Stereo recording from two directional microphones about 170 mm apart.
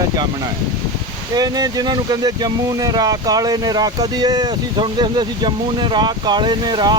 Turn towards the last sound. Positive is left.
turn(degrees=-25)  # may be behind; listen again after turning